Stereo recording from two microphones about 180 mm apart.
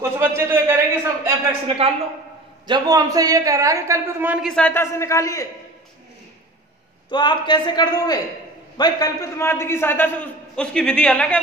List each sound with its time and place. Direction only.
0.0 s a man's voice: 15° right (ahead or behind)
2.6 s a man's voice: 25° right (ahead or behind); by 5.5 s 20° left (ahead or behind)
7.1 s a man's voice: 25° left (ahead or behind); by 11.3 s 5° left (ahead or behind)